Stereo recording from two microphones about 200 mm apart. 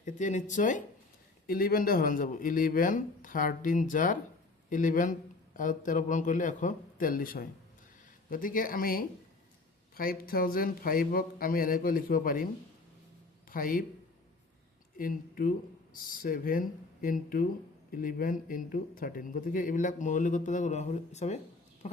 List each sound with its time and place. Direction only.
0.0 s speech: 40° left (ahead or behind)
13.5 s speech: 45° left (ahead or behind)
14.9 s a woman's voice: 45° left (ahead or behind)